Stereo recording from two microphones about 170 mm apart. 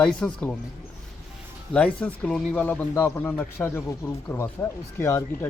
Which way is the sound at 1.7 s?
5° left (ahead or behind).